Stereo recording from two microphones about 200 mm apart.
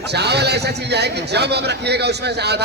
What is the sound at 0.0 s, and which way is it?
A man's voice, 55° right (ahead or behind).